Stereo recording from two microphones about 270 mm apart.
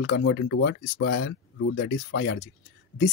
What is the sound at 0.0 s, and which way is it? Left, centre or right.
Speech, left.